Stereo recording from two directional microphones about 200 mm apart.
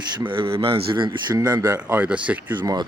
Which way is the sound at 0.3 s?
25° right (ahead or behind).